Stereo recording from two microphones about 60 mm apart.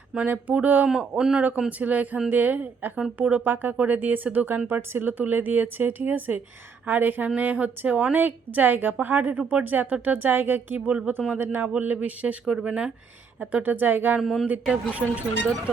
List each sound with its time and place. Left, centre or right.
0.3 s speech: right
0.9 s a man's voice: centre
1.8 s speech: right
14.2 s speech: centre
14.4 s speech: right